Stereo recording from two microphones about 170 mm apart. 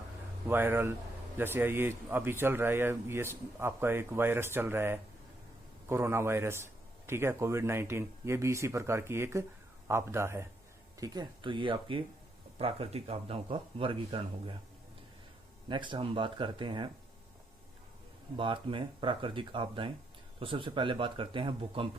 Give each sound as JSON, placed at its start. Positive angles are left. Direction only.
{"t": 0.4, "sound": "a man's voice", "side_deg": -10}
{"t": 15.7, "sound": "speech", "side_deg": -30}
{"t": 18.3, "sound": "a man's voice", "side_deg": -30}